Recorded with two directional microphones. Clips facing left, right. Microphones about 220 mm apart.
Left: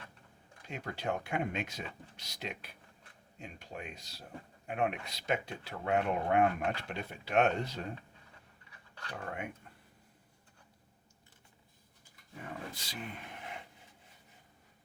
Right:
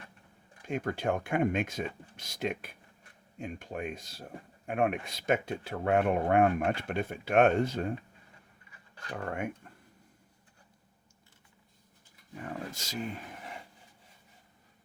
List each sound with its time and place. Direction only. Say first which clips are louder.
0.7 s speech: right 6 dB; 50° right (ahead or behind)
9.2 s speech: right 7 dB; 50° right (ahead or behind)
12.7 s speech: right 6 dB; 45° right (ahead or behind)